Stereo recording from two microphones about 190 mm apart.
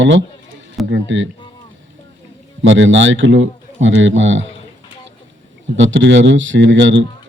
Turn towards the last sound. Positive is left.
turn(degrees=-75)  # may be behind; listen again after turning